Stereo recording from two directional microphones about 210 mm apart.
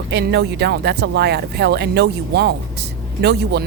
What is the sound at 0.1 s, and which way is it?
Speech, 55° right (ahead or behind).